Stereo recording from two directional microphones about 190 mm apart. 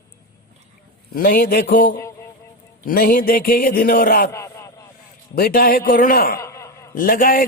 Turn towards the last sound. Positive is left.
turn(degrees=45)  # may be behind; listen again after turning